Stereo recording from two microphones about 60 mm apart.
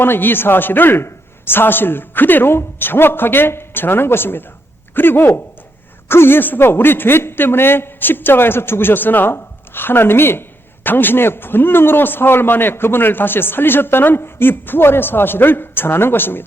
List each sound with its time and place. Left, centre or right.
0.0 s a man's voice: left